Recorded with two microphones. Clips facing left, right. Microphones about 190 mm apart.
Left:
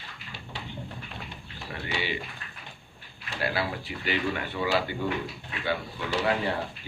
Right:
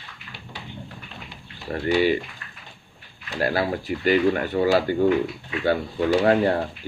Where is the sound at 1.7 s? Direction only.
45° right (ahead or behind).